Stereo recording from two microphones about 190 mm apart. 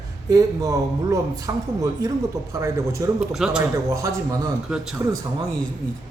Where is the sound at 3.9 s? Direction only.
15° right (ahead or behind).